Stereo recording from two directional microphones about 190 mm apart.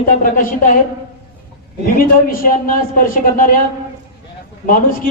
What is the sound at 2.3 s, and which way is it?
Speech, 50° left (ahead or behind).